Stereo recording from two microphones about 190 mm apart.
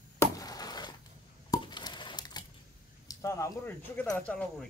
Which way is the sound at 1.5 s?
20° left (ahead or behind).